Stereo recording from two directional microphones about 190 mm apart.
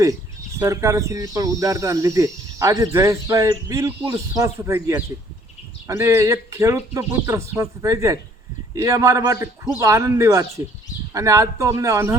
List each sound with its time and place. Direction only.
0.6 s speech: 15° right (ahead or behind)